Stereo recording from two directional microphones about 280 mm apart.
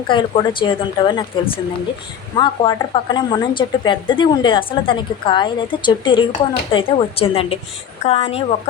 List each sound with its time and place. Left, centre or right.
0.1 s a woman's voice: centre